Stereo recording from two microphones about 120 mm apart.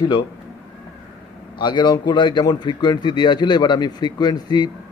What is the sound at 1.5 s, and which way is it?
A man's voice, 40° left (ahead or behind).